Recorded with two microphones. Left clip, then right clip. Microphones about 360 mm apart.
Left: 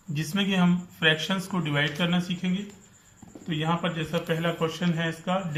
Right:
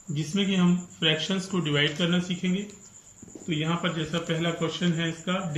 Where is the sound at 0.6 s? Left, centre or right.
Centre.